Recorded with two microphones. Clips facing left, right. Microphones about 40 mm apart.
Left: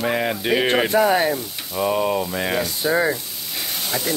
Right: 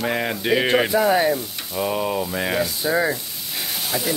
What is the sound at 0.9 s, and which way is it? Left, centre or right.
Speech, left.